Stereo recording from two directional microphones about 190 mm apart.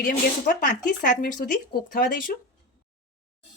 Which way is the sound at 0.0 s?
50° left (ahead or behind).